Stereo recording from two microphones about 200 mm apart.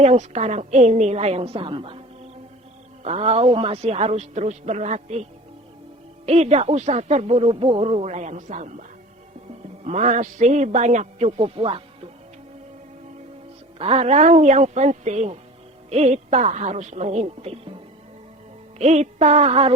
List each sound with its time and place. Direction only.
0.0 s speech: 35° right (ahead or behind)
3.0 s speech: 30° right (ahead or behind)
6.2 s speech: 30° right (ahead or behind)
9.8 s speech: 35° right (ahead or behind)
13.7 s speech: 30° right (ahead or behind)
18.8 s speech: 35° right (ahead or behind)